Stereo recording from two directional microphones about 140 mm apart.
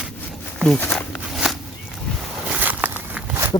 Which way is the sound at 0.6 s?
10° left (ahead or behind).